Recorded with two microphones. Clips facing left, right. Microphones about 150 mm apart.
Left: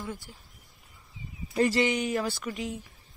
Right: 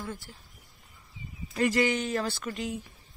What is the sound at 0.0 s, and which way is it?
Speech, 15° left (ahead or behind).